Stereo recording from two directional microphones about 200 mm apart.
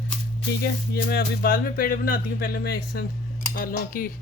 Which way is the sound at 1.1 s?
50° left (ahead or behind).